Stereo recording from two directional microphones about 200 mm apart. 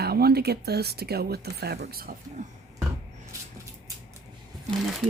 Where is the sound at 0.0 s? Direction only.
50° right (ahead or behind).